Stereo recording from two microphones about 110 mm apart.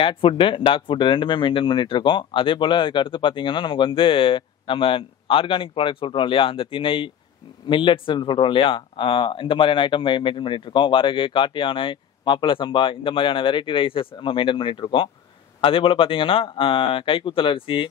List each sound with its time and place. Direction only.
0.0 s speech: 55° left (ahead or behind)